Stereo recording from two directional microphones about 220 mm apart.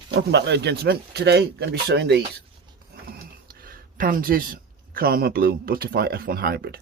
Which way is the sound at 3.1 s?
40° right (ahead or behind).